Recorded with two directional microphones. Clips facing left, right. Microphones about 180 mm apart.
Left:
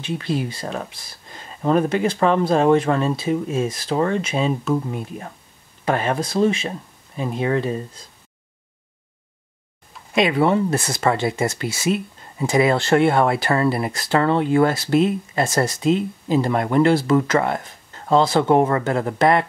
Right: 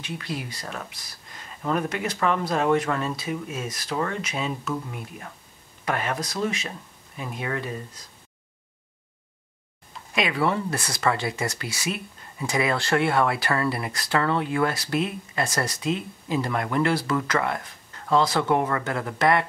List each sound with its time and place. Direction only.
0.0 s speech: 30° left (ahead or behind)
10.1 s speech: 25° left (ahead or behind)